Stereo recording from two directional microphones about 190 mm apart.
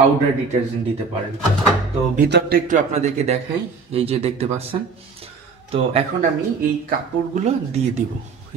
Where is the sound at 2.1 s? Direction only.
60° right (ahead or behind); by 4.7 s 30° right (ahead or behind).